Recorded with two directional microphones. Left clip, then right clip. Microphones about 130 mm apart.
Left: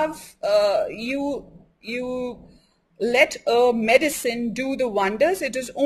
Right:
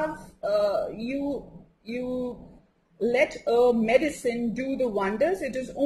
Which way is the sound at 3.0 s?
15° left (ahead or behind).